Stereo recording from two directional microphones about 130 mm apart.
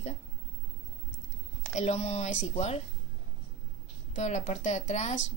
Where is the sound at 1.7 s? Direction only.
60° left (ahead or behind).